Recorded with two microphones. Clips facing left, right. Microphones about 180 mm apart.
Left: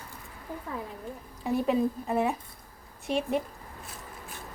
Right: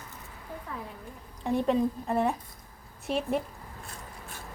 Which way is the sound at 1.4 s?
5° left (ahead or behind).